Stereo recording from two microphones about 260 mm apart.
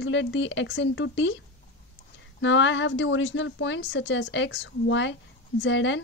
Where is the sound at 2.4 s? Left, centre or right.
Left.